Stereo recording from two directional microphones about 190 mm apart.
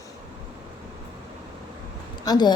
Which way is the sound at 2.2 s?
20° left (ahead or behind).